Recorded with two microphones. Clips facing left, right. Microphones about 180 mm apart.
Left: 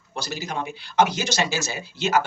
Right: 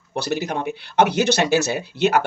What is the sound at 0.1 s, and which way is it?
Speech, 60° right (ahead or behind).